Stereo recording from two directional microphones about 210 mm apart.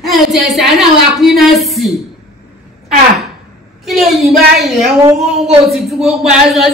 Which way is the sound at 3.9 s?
Centre (ahead or behind).